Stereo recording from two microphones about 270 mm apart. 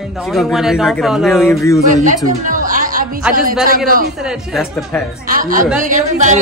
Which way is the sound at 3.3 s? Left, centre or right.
Right.